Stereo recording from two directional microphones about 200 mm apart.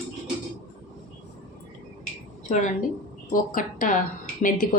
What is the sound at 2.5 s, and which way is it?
A woman's voice, 40° left (ahead or behind).